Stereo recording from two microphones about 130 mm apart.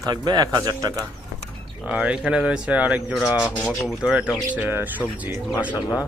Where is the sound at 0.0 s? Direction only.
30° right (ahead or behind).